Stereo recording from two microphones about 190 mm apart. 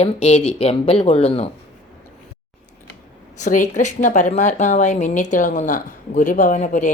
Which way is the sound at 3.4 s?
40° left (ahead or behind).